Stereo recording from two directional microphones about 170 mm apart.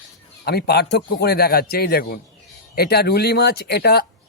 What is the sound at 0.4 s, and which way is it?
A man's voice, 70° left (ahead or behind).